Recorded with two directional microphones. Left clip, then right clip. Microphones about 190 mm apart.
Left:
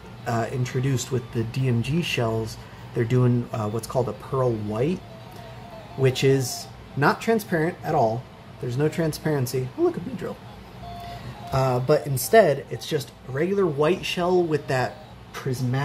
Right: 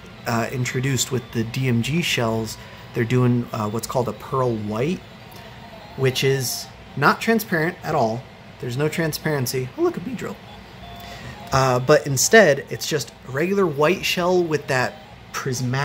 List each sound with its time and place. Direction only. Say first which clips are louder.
0.2 s speech: right 3 dB; 10° right (ahead or behind)
5.9 s speech: right 1 dB; 5° left (ahead or behind)
11.5 s speech: right 5 dB; 30° right (ahead or behind); by 14.9 s 10° right (ahead or behind)
15.3 s speech: right 4 dB; 25° right (ahead or behind)